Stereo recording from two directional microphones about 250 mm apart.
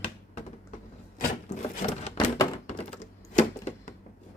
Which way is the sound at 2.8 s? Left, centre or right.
Left.